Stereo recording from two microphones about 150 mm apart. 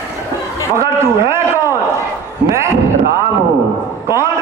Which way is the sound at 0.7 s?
20° right (ahead or behind).